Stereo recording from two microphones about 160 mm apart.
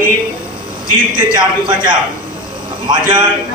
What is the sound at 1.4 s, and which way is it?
A man's voice, 30° right (ahead or behind).